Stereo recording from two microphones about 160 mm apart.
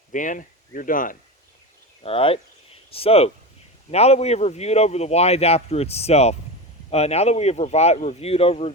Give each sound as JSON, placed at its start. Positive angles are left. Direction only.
{"t": 0.1, "sound": "speech", "side_deg": 55}
{"t": 2.0, "sound": "a man's voice", "side_deg": 35}